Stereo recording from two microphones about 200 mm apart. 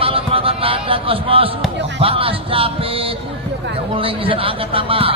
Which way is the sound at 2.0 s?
30° right (ahead or behind).